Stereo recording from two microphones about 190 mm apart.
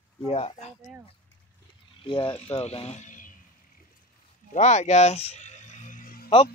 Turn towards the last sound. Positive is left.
turn(degrees=50)  # may be behind; listen again after turning